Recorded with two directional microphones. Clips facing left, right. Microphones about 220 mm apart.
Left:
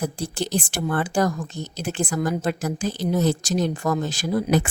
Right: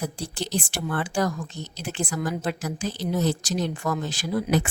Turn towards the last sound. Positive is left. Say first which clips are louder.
# left 3 dB
turn(degrees=45)  # may be behind; listen again after turning